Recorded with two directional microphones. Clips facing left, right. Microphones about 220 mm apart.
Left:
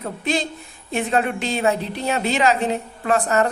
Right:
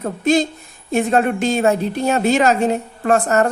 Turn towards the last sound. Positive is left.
turn(degrees=-45)  # may be behind; listen again after turning